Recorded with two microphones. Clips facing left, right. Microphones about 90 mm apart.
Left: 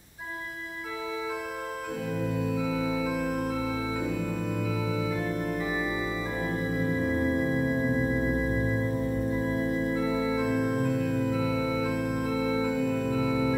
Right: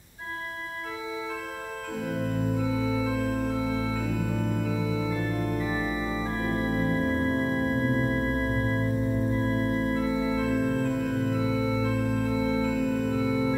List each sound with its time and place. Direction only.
2.8 s organ: 10° left (ahead or behind)
5.6 s organ: 10° left (ahead or behind)